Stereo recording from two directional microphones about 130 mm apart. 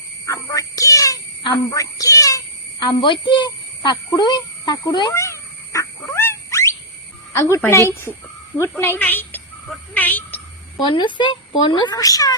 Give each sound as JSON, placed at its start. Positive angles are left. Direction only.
{"t": 0.3, "sound": "a sound", "side_deg": 25}
{"t": 1.5, "sound": "a child's voice", "side_deg": 25}
{"t": 2.8, "sound": "speech", "side_deg": 40}
{"t": 5.1, "sound": "dog", "side_deg": 20}
{"t": 7.3, "sound": "a woman's voice", "side_deg": 20}
{"t": 9.9, "sound": "a sound", "side_deg": 15}
{"t": 10.8, "sound": "speech", "side_deg": 40}